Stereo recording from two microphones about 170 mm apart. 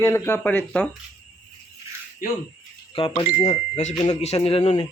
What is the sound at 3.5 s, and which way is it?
Speech, 40° left (ahead or behind).